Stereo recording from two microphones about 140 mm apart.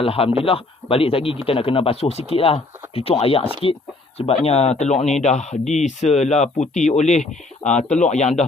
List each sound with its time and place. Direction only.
0.0 s a man's voice: 40° left (ahead or behind)